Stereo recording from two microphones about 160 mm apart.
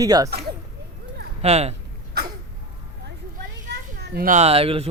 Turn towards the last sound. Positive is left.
turn(degrees=-35)  # may be behind; listen again after turning